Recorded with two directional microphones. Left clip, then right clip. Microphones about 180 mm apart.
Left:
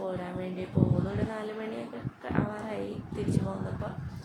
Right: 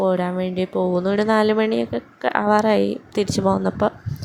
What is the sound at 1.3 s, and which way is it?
Speech, 60° right (ahead or behind).